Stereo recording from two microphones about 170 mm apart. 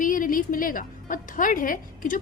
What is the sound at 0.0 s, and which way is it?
A woman's voice, 50° left (ahead or behind).